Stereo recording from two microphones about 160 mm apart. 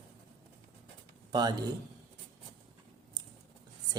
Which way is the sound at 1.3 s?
25° right (ahead or behind).